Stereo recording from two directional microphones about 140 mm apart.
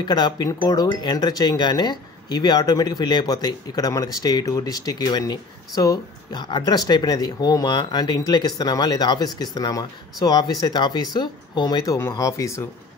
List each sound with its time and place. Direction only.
0.0 s speech: 30° left (ahead or behind)